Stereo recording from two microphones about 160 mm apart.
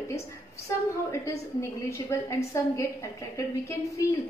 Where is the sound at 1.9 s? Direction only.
20° left (ahead or behind).